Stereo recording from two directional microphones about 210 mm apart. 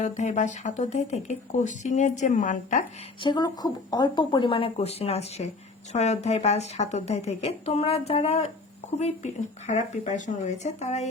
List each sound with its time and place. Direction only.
0.0 s speech: 35° left (ahead or behind)
3.2 s speech: 20° left (ahead or behind)